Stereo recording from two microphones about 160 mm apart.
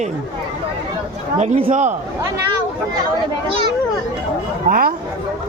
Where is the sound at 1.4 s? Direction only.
40° right (ahead or behind).